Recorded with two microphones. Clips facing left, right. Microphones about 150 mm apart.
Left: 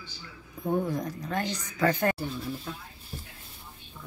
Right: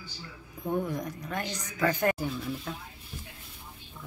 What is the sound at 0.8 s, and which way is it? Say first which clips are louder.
Speech: left 3 dB; 35° left (ahead or behind).